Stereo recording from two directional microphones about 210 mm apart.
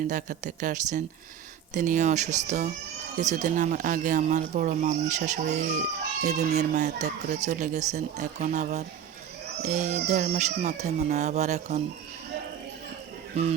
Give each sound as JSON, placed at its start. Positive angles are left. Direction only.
{"t": 0.1, "sound": "speech", "side_deg": -40}
{"t": 13.4, "sound": "music", "side_deg": -30}